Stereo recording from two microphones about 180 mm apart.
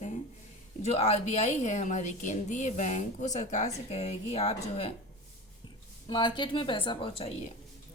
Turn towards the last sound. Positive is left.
turn(degrees=30)  # may be behind; listen again after turning